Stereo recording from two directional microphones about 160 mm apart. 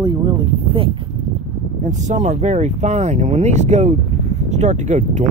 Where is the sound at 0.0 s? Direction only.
25° right (ahead or behind).